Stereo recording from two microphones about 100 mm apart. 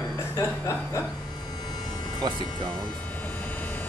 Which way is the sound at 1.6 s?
40° left (ahead or behind).